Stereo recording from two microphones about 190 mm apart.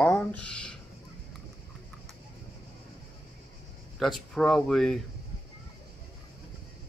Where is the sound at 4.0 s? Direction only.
Centre (ahead or behind).